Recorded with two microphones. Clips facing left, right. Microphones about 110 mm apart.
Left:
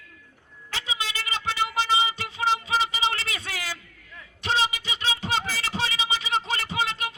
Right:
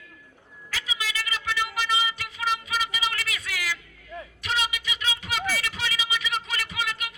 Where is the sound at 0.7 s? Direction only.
30° left (ahead or behind).